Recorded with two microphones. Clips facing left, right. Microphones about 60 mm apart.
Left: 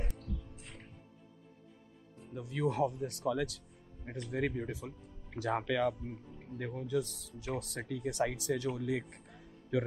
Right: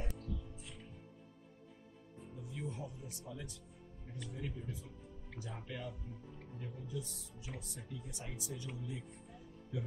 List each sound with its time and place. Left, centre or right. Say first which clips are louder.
2.3 s speech: left 13 dB; left
6.6 s speech: left 11 dB; left